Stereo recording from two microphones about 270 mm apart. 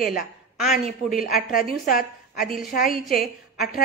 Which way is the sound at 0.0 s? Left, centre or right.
Left.